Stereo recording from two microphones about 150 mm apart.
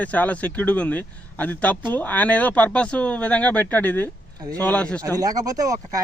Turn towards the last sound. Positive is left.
turn(degrees=-25)  # may be behind; listen again after turning